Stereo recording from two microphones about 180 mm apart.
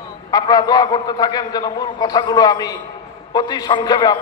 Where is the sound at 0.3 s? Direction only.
20° left (ahead or behind).